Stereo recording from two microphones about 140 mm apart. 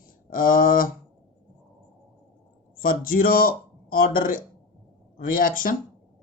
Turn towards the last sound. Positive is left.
turn(degrees=85)